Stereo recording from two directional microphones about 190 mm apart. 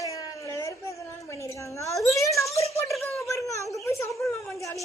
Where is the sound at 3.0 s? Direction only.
10° left (ahead or behind).